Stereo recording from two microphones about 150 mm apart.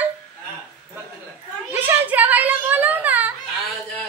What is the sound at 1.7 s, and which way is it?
Speech, 10° right (ahead or behind).